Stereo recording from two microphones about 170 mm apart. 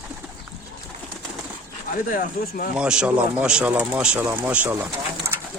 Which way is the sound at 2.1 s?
55° left (ahead or behind).